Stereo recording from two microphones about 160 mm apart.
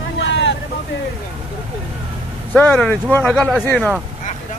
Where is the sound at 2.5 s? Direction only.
10° left (ahead or behind).